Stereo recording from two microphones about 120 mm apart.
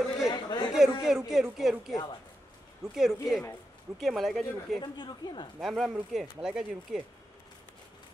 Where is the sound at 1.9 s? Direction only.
35° left (ahead or behind).